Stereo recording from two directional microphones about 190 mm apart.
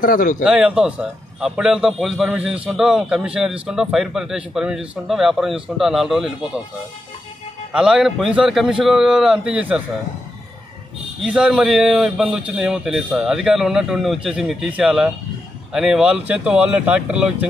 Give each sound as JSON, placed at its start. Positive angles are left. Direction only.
{"t": 0.0, "sound": "a man's voice", "side_deg": 45}
{"t": 0.4, "sound": "a man's voice", "side_deg": -5}
{"t": 7.7, "sound": "a man's voice", "side_deg": -5}
{"t": 11.2, "sound": "a man's voice", "side_deg": -5}